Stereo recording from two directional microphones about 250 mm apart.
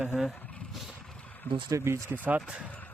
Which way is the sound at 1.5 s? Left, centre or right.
Centre.